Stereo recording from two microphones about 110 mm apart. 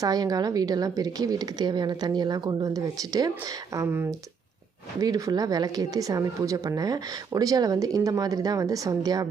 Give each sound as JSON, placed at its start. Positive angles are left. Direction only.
{"t": 0.0, "sound": "a woman's voice", "side_deg": -35}
{"t": 3.8, "sound": "speech", "side_deg": -20}
{"t": 4.9, "sound": "a woman's voice", "side_deg": -35}